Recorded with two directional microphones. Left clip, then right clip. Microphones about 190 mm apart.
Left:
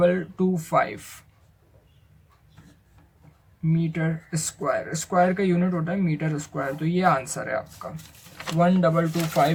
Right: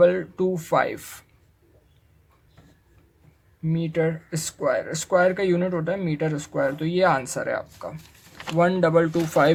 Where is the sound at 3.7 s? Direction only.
45° right (ahead or behind).